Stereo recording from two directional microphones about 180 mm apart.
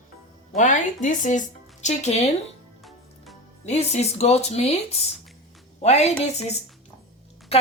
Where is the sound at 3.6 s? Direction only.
40° left (ahead or behind).